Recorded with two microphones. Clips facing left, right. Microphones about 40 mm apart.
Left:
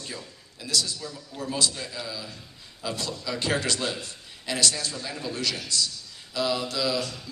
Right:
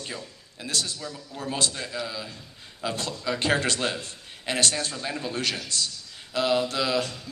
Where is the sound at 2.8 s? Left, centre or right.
Right.